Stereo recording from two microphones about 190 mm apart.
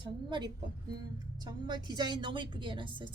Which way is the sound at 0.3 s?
25° right (ahead or behind).